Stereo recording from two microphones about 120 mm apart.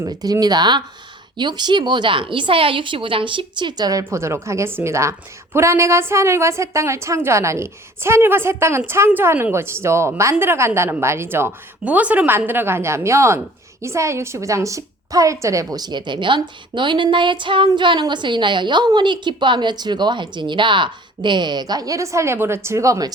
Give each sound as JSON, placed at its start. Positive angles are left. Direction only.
{"t": 0.0, "sound": "a woman's voice", "side_deg": -30}